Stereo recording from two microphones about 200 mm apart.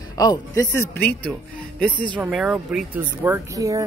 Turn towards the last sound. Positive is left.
turn(degrees=-15)  # may be behind; listen again after turning